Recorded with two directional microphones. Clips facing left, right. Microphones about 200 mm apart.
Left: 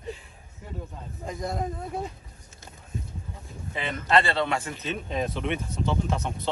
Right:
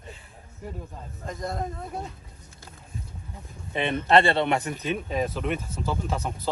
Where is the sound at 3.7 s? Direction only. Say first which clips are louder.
Right 4 dB; 25° right (ahead or behind).